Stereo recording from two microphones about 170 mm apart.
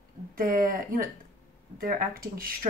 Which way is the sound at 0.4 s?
55° right (ahead or behind).